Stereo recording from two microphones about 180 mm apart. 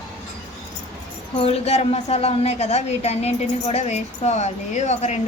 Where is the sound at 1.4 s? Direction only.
35° left (ahead or behind).